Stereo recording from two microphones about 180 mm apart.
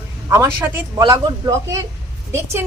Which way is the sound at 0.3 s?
15° right (ahead or behind).